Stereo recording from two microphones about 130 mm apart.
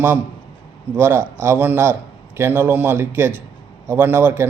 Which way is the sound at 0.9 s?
15° right (ahead or behind).